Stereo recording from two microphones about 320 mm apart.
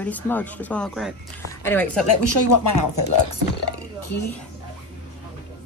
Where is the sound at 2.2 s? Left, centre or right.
Left.